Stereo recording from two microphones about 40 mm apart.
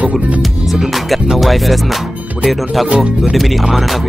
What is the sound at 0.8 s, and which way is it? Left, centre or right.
Music, centre.